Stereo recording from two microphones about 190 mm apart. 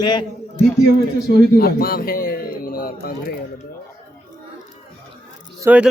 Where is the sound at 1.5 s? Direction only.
55° left (ahead or behind).